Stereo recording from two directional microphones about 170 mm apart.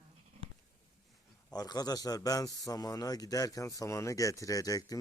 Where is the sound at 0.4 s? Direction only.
40° right (ahead or behind).